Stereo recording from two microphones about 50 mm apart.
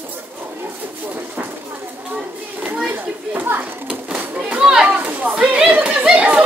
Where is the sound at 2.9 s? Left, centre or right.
Right.